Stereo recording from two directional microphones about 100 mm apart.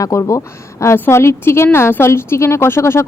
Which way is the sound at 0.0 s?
30° left (ahead or behind).